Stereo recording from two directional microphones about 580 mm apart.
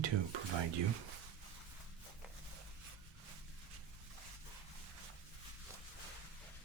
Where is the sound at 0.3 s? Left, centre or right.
Right.